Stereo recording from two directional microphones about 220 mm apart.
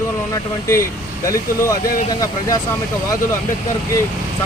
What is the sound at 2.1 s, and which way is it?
Speech, 15° left (ahead or behind).